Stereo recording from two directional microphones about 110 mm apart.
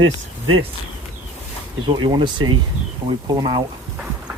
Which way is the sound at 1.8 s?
45° right (ahead or behind).